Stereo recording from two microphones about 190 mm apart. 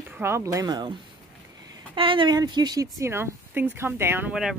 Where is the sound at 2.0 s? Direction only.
25° right (ahead or behind).